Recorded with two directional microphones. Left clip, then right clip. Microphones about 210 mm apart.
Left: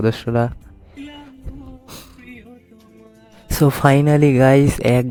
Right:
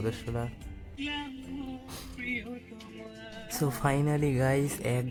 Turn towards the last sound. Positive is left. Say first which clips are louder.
# left 16 dB
turn(degrees=35)  # may be behind; listen again after turning